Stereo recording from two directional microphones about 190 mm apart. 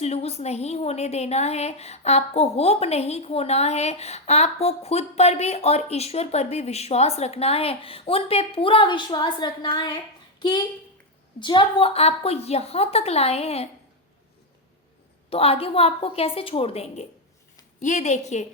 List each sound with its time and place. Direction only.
0.0 s a woman's voice: 35° left (ahead or behind)
11.3 s a woman's voice: 25° left (ahead or behind)
15.3 s a woman's voice: 30° left (ahead or behind)